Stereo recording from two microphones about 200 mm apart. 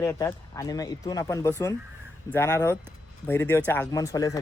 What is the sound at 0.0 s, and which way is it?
Speech, 15° left (ahead or behind).